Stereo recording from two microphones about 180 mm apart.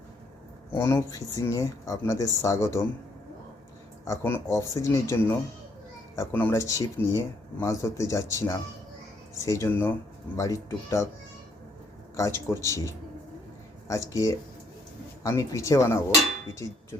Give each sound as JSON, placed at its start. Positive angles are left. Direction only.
{"t": 0.8, "sound": "speech", "side_deg": 15}
{"t": 4.0, "sound": "speech", "side_deg": 15}
{"t": 12.1, "sound": "speech", "side_deg": 15}